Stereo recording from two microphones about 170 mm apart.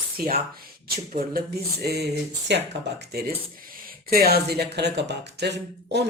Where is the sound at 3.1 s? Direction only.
70° right (ahead or behind).